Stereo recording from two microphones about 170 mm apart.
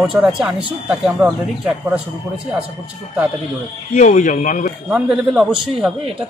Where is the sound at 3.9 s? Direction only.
45° left (ahead or behind).